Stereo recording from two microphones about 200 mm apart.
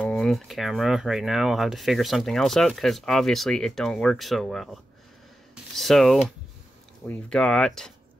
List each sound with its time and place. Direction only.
0.0 s speech: centre (ahead or behind)
5.8 s speech: centre (ahead or behind)